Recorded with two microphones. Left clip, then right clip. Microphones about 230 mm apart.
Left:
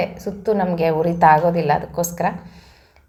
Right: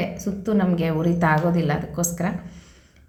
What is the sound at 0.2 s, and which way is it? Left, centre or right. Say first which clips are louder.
A woman's voice: left 5 dB; left.